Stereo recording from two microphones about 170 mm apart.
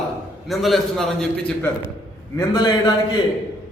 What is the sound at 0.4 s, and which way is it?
Speech, centre (ahead or behind).